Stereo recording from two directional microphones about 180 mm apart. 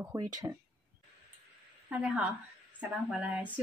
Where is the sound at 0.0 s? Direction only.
20° right (ahead or behind).